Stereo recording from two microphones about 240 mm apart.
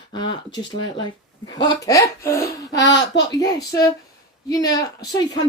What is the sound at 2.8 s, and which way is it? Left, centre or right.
Speech, left.